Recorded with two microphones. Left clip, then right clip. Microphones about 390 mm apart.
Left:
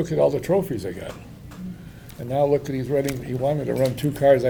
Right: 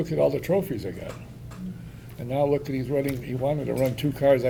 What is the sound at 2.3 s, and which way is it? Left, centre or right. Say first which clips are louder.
Speech: left 3 dB; centre.